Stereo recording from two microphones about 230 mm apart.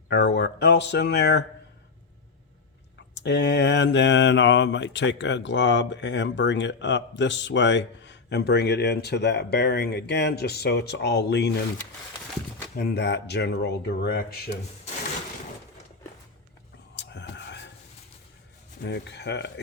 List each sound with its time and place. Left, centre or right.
0.1 s speech: left
3.2 s speech: left
12.7 s speech: left
16.9 s a sound: left
18.8 s speech: left